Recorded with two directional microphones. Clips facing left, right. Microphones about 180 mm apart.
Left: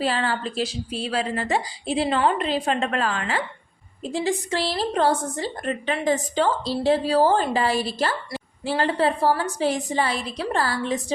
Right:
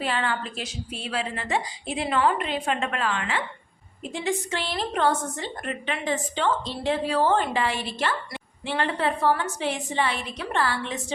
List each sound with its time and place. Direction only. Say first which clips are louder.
0.0 s a woman's voice: left 3 dB; 35° left (ahead or behind)